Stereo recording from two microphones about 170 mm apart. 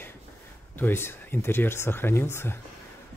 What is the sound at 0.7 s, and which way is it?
Speech, 15° left (ahead or behind).